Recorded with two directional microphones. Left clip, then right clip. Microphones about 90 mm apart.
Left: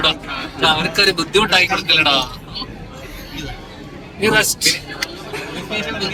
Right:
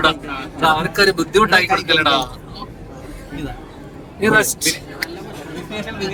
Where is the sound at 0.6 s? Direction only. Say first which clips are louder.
Even; 15° right (ahead or behind).